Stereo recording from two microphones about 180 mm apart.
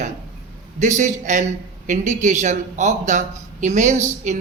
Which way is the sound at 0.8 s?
40° right (ahead or behind).